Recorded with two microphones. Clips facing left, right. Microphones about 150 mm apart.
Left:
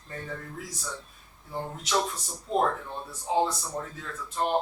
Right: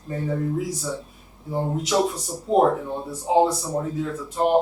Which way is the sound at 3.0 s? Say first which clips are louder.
Right 7 dB; 25° right (ahead or behind).